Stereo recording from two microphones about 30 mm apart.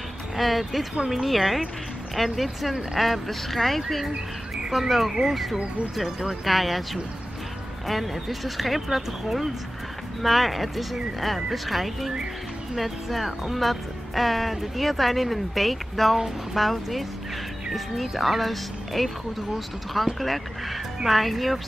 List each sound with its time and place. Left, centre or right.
0.4 s speech: centre
4.6 s speech: centre